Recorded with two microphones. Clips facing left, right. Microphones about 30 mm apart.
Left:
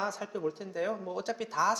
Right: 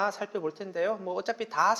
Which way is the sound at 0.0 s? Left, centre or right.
Centre.